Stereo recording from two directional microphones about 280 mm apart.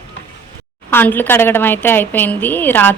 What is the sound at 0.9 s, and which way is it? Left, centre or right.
A woman's voice, centre.